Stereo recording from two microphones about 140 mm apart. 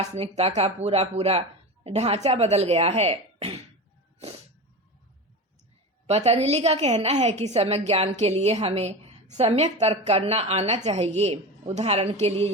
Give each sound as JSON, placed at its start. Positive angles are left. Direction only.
{"t": 0.0, "sound": "a woman's voice", "side_deg": -50}
{"t": 6.1, "sound": "a woman's voice", "side_deg": -50}